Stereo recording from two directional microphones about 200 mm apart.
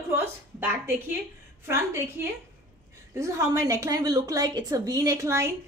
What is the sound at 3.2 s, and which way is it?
A woman's voice, 15° right (ahead or behind).